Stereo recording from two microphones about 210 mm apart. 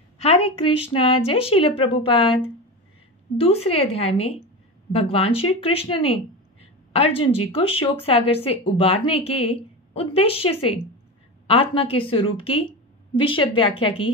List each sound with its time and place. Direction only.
0.2 s a woman's voice: 25° left (ahead or behind)
3.3 s a woman's voice: 30° left (ahead or behind)